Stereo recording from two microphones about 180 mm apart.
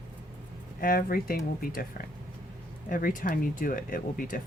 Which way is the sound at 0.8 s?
50° left (ahead or behind).